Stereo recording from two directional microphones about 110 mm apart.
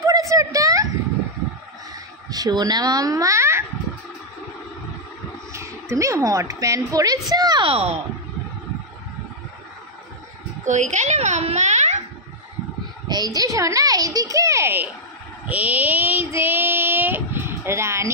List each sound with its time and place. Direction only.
0.0 s a sound: 30° right (ahead or behind)
2.2 s speech: 35° right (ahead or behind)
5.5 s a woman's voice: 25° right (ahead or behind)
7.6 s speech: 65° right (ahead or behind)
10.7 s a child's voice: 90° right
13.1 s a woman's voice: 35° right (ahead or behind)
15.4 s child singing: 15° right (ahead or behind)